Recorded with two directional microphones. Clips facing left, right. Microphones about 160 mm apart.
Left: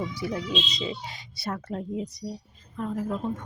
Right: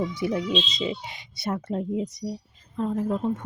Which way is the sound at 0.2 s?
20° right (ahead or behind).